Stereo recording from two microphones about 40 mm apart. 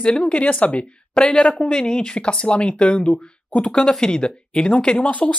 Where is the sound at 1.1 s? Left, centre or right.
Centre.